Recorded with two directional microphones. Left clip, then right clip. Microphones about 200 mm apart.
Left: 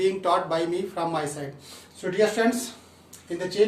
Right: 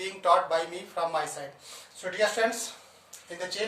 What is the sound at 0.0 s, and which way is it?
Speech, 5° left (ahead or behind).